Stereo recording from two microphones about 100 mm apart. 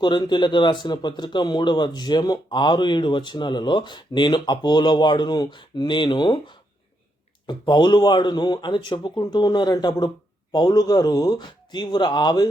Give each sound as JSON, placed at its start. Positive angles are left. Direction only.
{"t": 0.0, "sound": "speech", "side_deg": 50}